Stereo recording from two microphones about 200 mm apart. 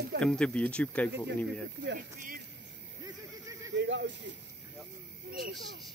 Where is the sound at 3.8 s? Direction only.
60° right (ahead or behind).